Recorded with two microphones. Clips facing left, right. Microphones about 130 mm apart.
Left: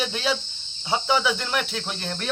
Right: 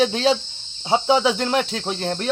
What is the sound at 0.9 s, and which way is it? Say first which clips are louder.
Cricket: right 5 dB; 25° right (ahead or behind).